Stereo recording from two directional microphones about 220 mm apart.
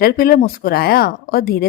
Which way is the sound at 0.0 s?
45° left (ahead or behind).